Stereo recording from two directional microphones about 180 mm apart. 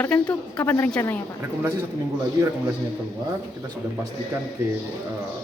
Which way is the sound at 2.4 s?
20° right (ahead or behind).